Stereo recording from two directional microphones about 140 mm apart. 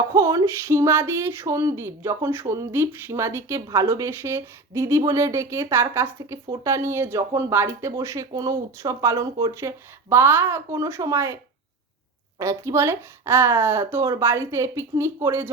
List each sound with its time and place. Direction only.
0.1 s speech: 25° right (ahead or behind)
12.4 s speech: 20° right (ahead or behind)